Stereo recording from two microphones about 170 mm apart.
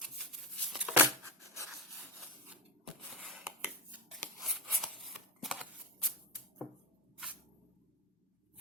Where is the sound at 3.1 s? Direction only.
Centre (ahead or behind).